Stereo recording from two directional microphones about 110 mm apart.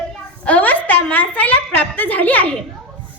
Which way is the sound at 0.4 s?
15° left (ahead or behind).